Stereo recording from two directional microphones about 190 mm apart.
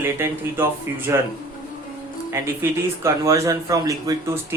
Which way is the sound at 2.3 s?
15° right (ahead or behind).